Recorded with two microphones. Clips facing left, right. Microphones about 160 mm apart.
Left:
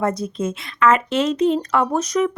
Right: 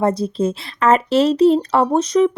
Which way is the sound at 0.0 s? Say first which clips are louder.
Right 4 dB; 30° right (ahead or behind).